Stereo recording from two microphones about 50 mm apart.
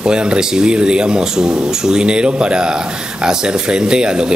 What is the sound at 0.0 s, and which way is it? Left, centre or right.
Speech, centre.